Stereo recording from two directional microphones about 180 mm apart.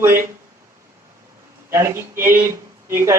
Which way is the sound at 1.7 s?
15° right (ahead or behind).